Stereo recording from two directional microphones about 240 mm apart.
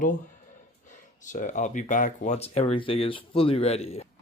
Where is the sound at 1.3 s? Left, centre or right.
Left.